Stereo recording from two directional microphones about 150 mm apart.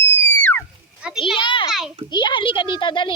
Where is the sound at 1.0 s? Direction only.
5° right (ahead or behind).